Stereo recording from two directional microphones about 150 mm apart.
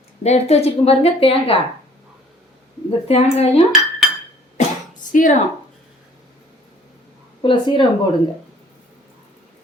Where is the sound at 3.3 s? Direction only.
45° left (ahead or behind).